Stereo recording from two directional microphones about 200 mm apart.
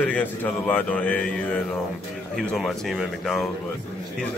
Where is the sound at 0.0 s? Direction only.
10° left (ahead or behind).